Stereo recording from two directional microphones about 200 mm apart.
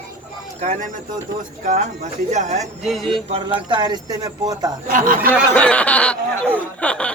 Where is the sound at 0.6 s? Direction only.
35° right (ahead or behind).